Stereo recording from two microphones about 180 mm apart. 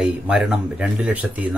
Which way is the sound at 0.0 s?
Centre (ahead or behind).